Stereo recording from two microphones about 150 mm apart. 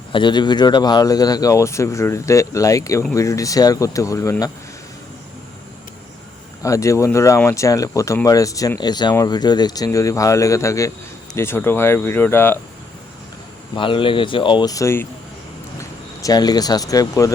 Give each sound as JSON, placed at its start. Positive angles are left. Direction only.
{"t": 0.1, "sound": "speech", "side_deg": 30}
{"t": 6.6, "sound": "speech", "side_deg": 20}
{"t": 13.7, "sound": "speech", "side_deg": 35}